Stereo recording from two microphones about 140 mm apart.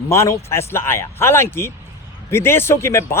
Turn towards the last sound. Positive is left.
turn(degrees=20)  # may be behind; listen again after turning